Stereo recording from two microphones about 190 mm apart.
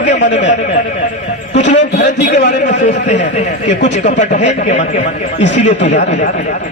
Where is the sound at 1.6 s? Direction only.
65° left (ahead or behind).